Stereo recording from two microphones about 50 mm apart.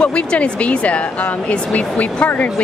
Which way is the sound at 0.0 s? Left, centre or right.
Left.